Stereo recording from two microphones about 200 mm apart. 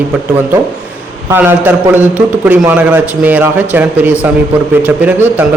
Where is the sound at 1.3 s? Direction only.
10° right (ahead or behind).